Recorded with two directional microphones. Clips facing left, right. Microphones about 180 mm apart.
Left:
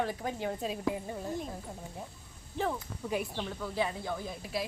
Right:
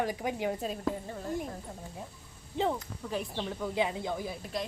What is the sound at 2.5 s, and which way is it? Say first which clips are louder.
Speech: right 3 dB; 20° right (ahead or behind).